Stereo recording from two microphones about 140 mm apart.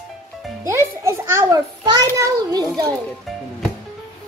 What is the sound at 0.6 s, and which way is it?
A child's voice, 20° right (ahead or behind).